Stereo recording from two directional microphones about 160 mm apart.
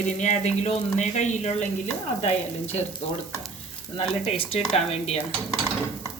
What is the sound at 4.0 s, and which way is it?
Speech, 40° left (ahead or behind).